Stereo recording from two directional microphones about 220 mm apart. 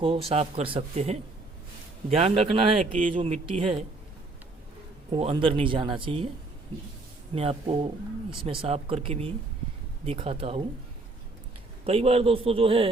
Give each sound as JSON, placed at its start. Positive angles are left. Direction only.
{"t": 0.0, "sound": "speech", "side_deg": -25}
{"t": 5.1, "sound": "speech", "side_deg": -25}
{"t": 7.3, "sound": "speech", "side_deg": -25}
{"t": 11.9, "sound": "speech", "side_deg": -25}